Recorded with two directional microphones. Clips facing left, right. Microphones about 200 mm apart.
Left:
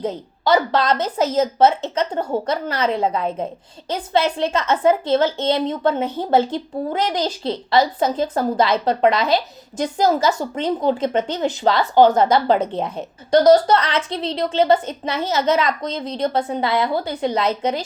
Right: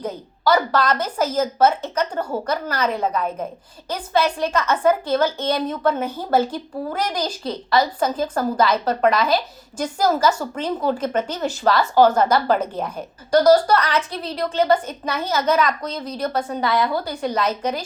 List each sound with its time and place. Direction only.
0.0 s a woman's voice: 25° left (ahead or behind)